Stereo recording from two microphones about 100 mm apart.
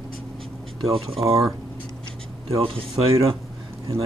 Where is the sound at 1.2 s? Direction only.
65° right (ahead or behind).